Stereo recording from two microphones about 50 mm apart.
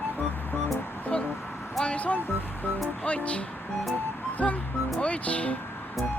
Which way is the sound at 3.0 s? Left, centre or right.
Left.